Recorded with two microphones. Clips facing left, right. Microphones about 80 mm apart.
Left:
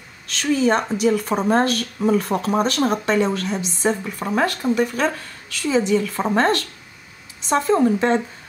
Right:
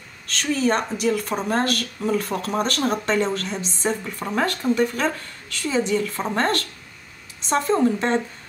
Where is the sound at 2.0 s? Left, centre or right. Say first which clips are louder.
Left 6 dB; left.